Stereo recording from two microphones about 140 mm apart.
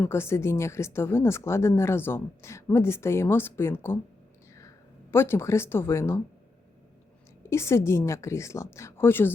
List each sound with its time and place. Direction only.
0.0 s speech: 20° left (ahead or behind)
5.1 s speech: 20° left (ahead or behind)
7.4 s speech: 20° left (ahead or behind)